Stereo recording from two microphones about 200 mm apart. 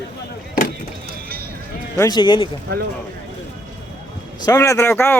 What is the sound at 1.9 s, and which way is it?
Speech, 20° left (ahead or behind).